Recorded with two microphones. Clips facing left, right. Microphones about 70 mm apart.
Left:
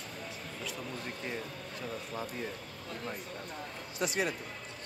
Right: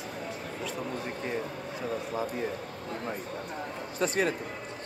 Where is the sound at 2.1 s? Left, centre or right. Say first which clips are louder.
Right 6 dB; centre.